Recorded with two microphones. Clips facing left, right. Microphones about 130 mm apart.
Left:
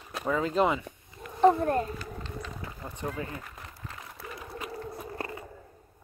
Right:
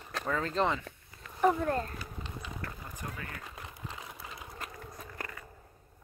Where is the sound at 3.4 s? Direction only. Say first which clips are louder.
Even; 15° right (ahead or behind).